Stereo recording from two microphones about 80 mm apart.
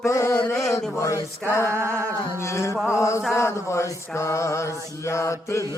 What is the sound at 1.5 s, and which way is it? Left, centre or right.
Speech, left.